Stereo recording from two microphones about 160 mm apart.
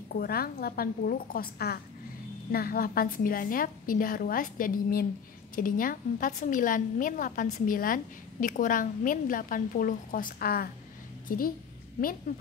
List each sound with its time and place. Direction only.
0.1 s a woman's voice: 70° left (ahead or behind)